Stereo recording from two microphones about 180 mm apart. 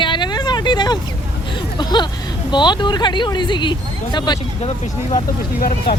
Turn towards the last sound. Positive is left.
turn(degrees=55)  # may be behind; listen again after turning